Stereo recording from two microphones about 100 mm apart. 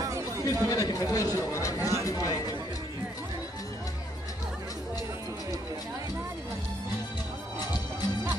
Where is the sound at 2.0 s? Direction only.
35° left (ahead or behind).